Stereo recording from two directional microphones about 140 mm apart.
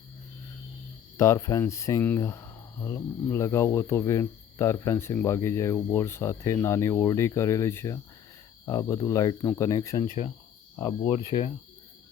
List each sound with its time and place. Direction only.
1.1 s speech: 20° left (ahead or behind)
11.3 s speech: 45° left (ahead or behind)